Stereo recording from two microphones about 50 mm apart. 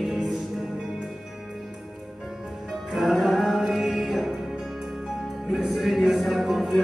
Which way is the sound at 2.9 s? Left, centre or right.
Centre.